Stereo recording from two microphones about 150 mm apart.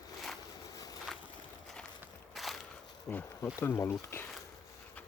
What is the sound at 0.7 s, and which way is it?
Vehicle, 25° left (ahead or behind).